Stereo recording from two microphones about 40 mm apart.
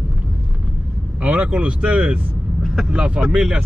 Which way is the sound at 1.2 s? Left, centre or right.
Right.